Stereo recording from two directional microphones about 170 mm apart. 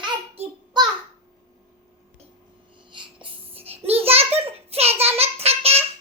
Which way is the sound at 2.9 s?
30° right (ahead or behind).